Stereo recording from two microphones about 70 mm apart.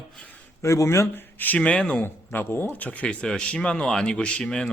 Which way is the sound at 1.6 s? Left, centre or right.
Centre.